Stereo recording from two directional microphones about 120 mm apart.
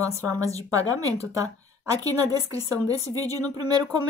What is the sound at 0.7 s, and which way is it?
A woman's voice, 30° right (ahead or behind).